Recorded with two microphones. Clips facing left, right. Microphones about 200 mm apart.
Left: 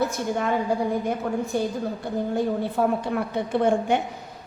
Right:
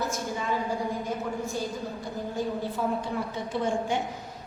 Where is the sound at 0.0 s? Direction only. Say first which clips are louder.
Left 6 dB; 65° left (ahead or behind).